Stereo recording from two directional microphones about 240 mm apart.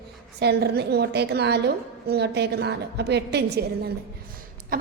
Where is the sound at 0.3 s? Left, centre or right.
Right.